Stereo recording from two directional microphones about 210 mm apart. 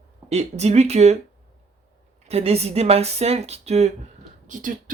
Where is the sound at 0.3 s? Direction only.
30° right (ahead or behind).